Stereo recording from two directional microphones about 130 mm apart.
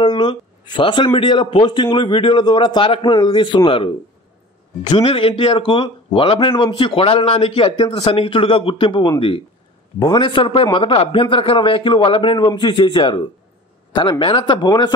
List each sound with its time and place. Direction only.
0.0 s speech: 35° left (ahead or behind)